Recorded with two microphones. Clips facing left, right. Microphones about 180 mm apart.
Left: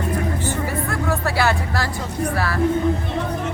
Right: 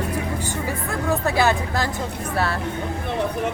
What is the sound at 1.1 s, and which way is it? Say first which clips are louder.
Speech: right 2 dB; 20° right (ahead or behind).